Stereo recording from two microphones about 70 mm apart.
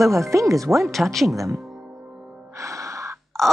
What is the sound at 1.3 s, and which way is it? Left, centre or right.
Speech, right.